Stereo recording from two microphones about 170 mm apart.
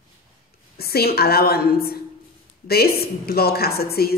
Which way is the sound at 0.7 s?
65° left (ahead or behind).